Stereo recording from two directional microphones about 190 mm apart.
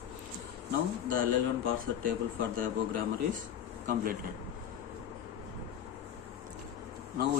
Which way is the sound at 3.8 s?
50° right (ahead or behind).